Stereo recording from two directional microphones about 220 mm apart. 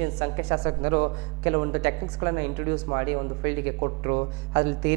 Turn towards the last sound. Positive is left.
turn(degrees=-15)  # may be behind; listen again after turning